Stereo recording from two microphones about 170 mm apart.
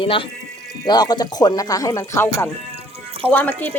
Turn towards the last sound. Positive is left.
turn(degrees=10)  # may be behind; listen again after turning